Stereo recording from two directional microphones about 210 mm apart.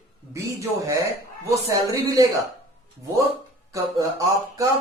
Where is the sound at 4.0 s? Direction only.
15° right (ahead or behind).